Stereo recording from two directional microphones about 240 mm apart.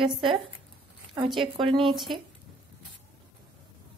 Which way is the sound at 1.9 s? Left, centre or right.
Centre.